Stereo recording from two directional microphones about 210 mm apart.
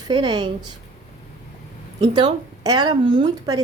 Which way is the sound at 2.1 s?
20° right (ahead or behind).